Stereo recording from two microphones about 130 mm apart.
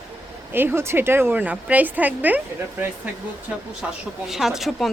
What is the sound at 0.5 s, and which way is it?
A woman's voice, 15° right (ahead or behind).